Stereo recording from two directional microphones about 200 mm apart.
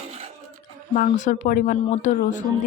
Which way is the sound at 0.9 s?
40° left (ahead or behind).